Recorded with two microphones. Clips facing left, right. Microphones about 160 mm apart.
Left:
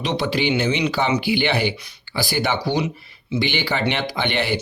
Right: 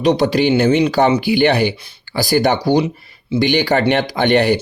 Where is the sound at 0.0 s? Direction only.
40° right (ahead or behind).